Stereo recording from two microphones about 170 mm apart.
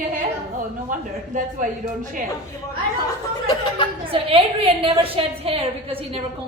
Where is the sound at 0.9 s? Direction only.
50° right (ahead or behind).